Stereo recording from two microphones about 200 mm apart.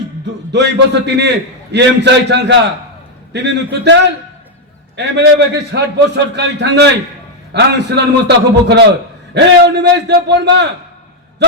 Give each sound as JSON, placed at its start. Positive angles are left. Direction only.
{"t": 0.5, "sound": "a man's voice", "side_deg": -60}